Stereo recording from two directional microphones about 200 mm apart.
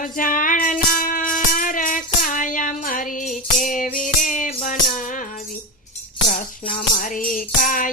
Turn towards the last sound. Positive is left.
turn(degrees=40)  # may be behind; listen again after turning